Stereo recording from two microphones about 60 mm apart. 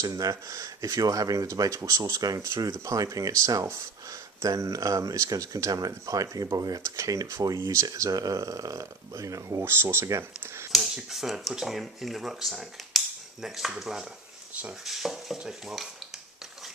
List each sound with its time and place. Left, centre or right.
0.0 s speech: right
6.6 s speech: right
6.8 s speech: right
9.6 s speech: right
10.7 s speech: centre